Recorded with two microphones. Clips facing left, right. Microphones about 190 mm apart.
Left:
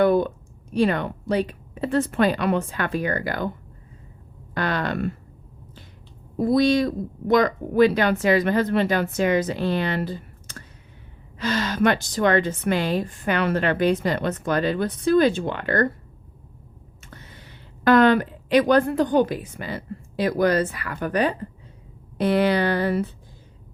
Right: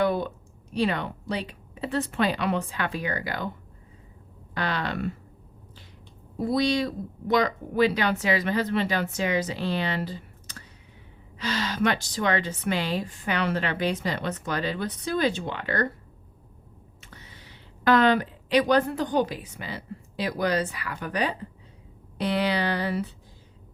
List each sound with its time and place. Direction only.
0.0 s a sound: 50° left (ahead or behind)
0.7 s a woman's voice: 50° left (ahead or behind)
4.5 s speech: 50° left (ahead or behind)
6.3 s a woman's voice: 50° left (ahead or behind)
17.1 s a woman's voice: 50° left (ahead or behind)